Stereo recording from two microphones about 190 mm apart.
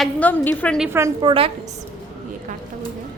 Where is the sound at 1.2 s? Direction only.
30° right (ahead or behind).